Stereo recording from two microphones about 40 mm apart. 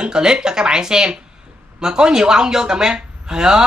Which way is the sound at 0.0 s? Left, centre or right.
Centre.